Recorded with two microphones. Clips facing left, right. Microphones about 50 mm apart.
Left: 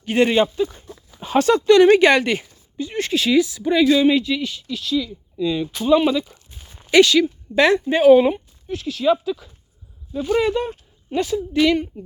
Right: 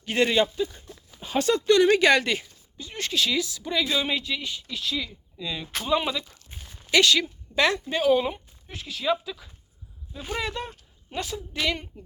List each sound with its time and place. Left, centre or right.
0.0 s speech: centre
0.5 s speech: left
1.8 s speech: left
2.7 s speech: centre
3.9 s speech: centre
5.4 s a woman's voice: centre
7.9 s speech: left
8.6 s a woman's voice: centre
10.3 s speech: centre
11.1 s a woman's voice: centre